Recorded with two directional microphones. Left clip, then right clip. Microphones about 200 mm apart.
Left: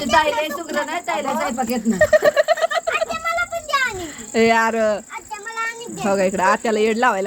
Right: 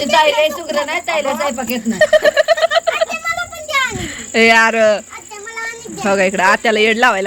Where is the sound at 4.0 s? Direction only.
Centre (ahead or behind).